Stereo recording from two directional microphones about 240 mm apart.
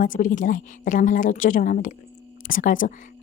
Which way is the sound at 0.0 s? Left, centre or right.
Left.